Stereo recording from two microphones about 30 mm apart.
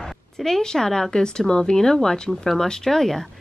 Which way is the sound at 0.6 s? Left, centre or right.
Centre.